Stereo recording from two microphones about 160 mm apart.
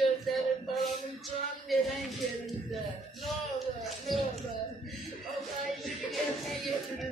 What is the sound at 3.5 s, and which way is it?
Music, centre (ahead or behind).